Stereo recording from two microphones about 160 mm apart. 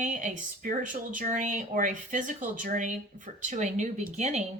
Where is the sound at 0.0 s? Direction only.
50° right (ahead or behind).